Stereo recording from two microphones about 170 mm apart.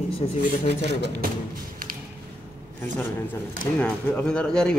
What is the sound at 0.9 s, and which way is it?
Speech, 85° right.